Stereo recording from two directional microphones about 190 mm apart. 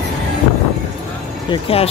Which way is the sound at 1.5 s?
30° left (ahead or behind).